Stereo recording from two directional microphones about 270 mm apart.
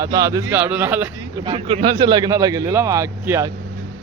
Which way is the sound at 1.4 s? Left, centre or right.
Centre.